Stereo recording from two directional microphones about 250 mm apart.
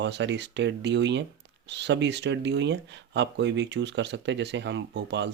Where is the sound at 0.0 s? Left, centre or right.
Right.